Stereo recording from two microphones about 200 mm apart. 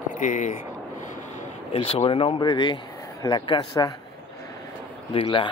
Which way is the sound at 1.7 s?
30° left (ahead or behind).